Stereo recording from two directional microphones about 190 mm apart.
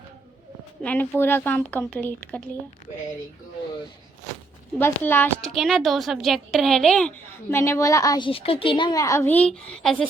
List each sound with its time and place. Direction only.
0.8 s a woman's voice: 10° left (ahead or behind)
4.8 s a woman's voice: 10° left (ahead or behind)
7.5 s a woman's voice: 15° left (ahead or behind)